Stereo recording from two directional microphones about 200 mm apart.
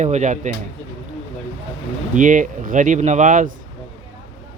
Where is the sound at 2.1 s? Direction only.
40° right (ahead or behind).